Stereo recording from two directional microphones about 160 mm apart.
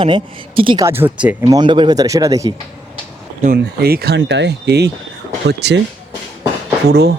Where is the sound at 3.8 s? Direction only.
80° right.